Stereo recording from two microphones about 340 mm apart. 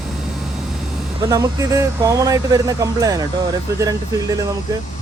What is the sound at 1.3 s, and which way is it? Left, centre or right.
Speech, centre.